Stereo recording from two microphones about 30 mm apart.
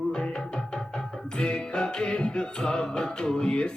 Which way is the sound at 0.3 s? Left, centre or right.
Left.